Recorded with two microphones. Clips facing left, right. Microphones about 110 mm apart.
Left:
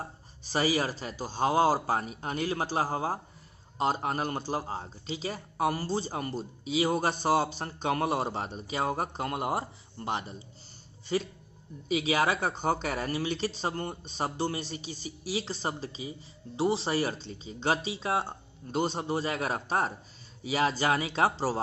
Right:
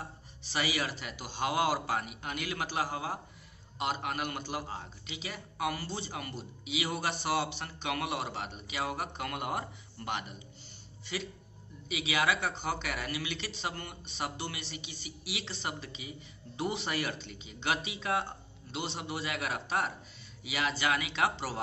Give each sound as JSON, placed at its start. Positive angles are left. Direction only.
{"t": 0.0, "sound": "a man's voice", "side_deg": 40}
{"t": 18.7, "sound": "a man's voice", "side_deg": 40}